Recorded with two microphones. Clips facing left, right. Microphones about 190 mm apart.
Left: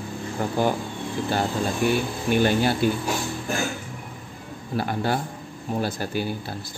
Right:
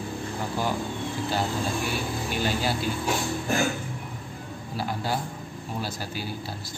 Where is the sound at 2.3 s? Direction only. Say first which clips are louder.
Left 8 dB; 55° left (ahead or behind).